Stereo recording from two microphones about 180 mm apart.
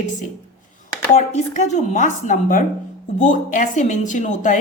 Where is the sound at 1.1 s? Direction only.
40° left (ahead or behind).